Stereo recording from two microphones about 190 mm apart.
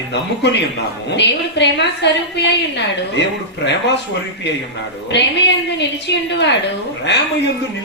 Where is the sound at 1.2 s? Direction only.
65° left (ahead or behind).